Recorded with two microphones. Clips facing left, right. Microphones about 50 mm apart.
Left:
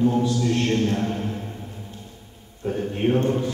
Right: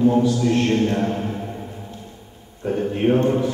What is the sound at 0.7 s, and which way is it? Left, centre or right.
Speech, right.